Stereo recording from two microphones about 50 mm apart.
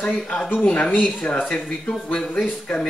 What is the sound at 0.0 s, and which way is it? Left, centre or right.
Speech, centre.